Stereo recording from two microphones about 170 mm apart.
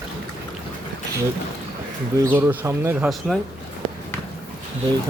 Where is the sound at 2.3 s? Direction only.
15° right (ahead or behind).